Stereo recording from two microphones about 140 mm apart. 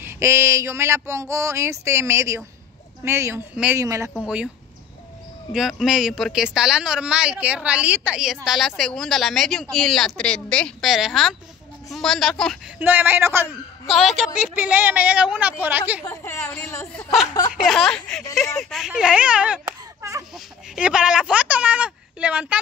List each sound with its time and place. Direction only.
0.0 s speech: 20° right (ahead or behind)
3.8 s speech: 25° right (ahead or behind)
5.5 s speech: centre (ahead or behind)
12.7 s speech: 15° right (ahead or behind)
13.9 s speech: centre (ahead or behind)
16.0 s speech: 20° left (ahead or behind)
17.6 s speech: 5° left (ahead or behind)
20.0 s speech: 20° right (ahead or behind)
20.3 s speech: 5° right (ahead or behind)